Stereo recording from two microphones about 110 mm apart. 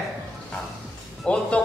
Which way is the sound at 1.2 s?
10° left (ahead or behind).